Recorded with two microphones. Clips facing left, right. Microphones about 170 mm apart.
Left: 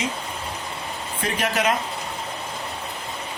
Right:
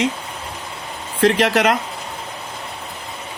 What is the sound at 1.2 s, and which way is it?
Speech, 80° right.